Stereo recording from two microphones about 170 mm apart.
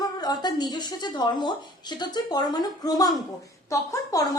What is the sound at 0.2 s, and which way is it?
Speech, 25° left (ahead or behind).